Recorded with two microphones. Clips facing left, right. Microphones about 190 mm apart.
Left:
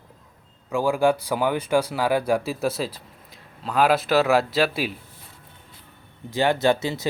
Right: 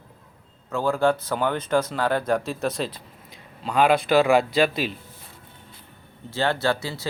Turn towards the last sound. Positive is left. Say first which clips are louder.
# left 4 dB
turn(degrees=20)  # may be behind; listen again after turning